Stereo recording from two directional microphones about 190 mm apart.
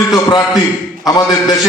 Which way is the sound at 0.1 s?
20° left (ahead or behind).